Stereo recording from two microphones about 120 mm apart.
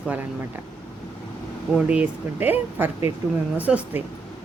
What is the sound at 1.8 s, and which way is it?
Speech, 10° right (ahead or behind).